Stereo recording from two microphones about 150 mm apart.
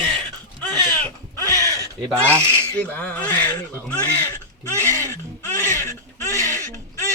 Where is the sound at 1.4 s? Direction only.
25° right (ahead or behind).